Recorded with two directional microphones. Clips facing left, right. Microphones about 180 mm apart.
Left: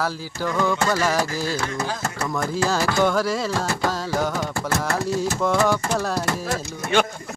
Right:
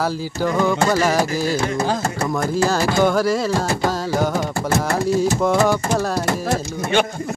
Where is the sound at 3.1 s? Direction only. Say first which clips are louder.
Right 4 dB; 5° right (ahead or behind).